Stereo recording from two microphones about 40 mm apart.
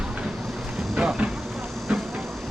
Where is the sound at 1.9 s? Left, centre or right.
Right.